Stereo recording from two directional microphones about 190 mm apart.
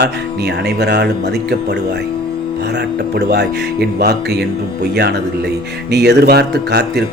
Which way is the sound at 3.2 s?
60° right (ahead or behind).